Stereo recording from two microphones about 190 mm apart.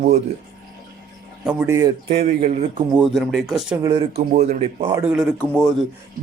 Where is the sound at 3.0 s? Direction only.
Centre (ahead or behind).